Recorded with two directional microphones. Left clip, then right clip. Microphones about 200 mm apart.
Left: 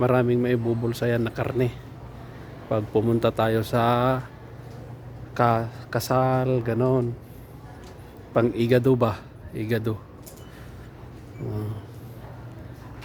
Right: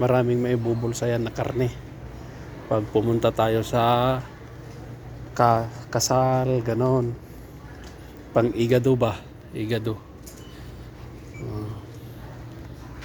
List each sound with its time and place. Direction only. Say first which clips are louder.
0.0 s speech: even; 20° left (ahead or behind)
5.3 s speech: right 2 dB; 20° left (ahead or behind)
8.3 s a man's voice: even; 20° left (ahead or behind)